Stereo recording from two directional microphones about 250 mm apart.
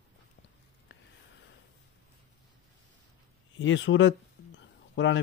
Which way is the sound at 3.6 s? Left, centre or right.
Left.